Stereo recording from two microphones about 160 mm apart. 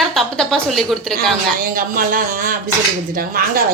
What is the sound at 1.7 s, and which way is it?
Speech, 65° right (ahead or behind).